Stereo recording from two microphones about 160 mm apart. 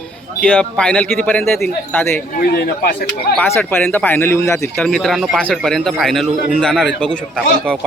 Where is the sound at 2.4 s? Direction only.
75° left (ahead or behind).